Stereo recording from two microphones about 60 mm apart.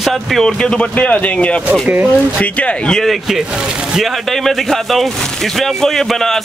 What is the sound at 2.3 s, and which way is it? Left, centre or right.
Speech, left.